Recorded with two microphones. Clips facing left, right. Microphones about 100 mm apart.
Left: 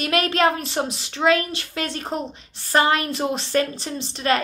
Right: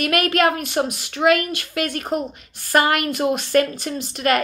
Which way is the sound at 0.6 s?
30° left (ahead or behind).